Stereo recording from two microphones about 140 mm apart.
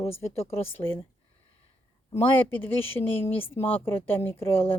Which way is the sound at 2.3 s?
15° left (ahead or behind).